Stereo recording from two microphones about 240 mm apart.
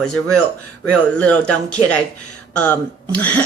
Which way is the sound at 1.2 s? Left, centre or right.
Centre.